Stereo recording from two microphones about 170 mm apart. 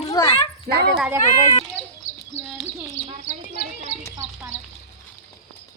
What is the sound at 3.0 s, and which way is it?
Speech, 25° right (ahead or behind).